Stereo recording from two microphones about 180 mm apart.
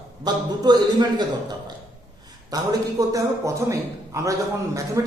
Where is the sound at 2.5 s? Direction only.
20° right (ahead or behind).